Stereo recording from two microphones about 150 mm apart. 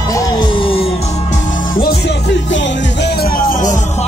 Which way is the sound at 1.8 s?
90° left.